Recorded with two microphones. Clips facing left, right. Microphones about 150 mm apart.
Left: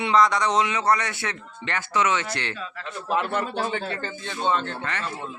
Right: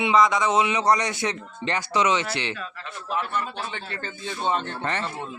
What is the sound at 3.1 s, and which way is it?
Speech, 70° left (ahead or behind).